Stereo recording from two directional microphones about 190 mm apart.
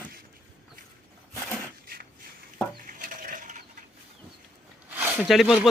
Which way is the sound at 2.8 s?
45° right (ahead or behind).